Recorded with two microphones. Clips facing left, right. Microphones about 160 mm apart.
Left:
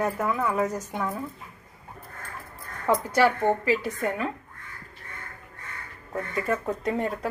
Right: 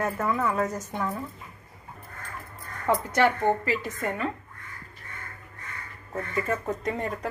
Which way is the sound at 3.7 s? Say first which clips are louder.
Left 3 dB; 10° left (ahead or behind).